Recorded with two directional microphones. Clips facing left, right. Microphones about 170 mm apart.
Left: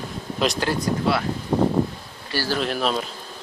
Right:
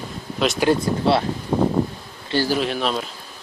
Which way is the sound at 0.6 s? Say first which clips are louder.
Right 4 dB; 25° right (ahead or behind).